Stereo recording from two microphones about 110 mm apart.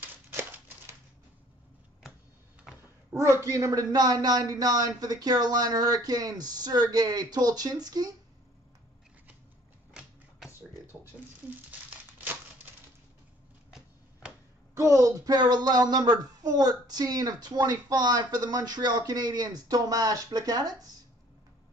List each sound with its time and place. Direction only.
0.0 s typewriter: 20° right (ahead or behind)
2.7 s a sound: 5° right (ahead or behind)
3.2 s speech: 25° right (ahead or behind)
14.7 s speech: 25° right (ahead or behind)